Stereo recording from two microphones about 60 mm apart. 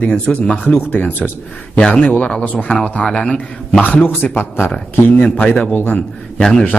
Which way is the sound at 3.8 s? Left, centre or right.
Left.